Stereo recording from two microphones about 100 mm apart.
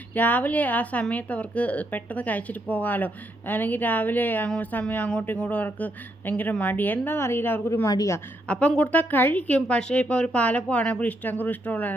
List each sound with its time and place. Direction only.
0.1 s a woman's voice: 15° left (ahead or behind)
7.9 s a woman's voice: 35° left (ahead or behind)
8.4 s a woman's voice: 10° left (ahead or behind)